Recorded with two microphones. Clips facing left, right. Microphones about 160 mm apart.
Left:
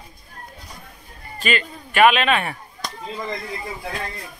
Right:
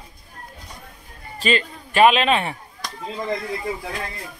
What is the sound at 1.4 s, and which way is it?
A man's voice, 30° right (ahead or behind).